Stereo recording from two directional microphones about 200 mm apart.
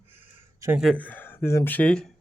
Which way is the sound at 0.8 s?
5° left (ahead or behind).